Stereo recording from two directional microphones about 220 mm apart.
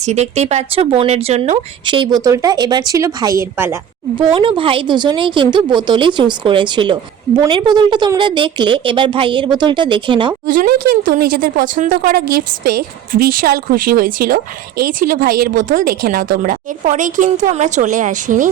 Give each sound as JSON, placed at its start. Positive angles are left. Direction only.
{"t": 0.0, "sound": "speech", "side_deg": -30}
{"t": 10.4, "sound": "a woman's voice", "side_deg": -35}